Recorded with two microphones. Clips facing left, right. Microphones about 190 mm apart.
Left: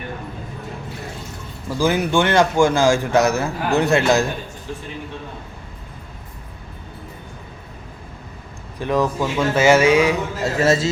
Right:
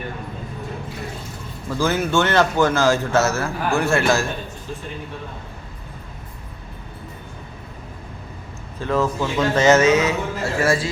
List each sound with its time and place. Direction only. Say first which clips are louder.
1.8 s a man's voice: left 2 dB; 15° left (ahead or behind)
8.8 s a man's voice: left 1 dB; 15° left (ahead or behind)